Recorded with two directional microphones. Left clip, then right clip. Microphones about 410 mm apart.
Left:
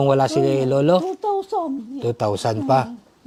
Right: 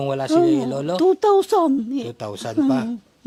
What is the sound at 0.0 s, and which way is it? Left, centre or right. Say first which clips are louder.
A man's voice: left 1 dB; centre.